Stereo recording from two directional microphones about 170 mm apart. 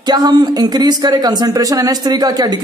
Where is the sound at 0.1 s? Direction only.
25° right (ahead or behind).